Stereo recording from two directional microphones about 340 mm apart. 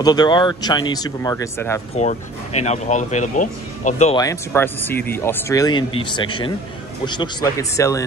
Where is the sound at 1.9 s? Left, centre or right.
Centre.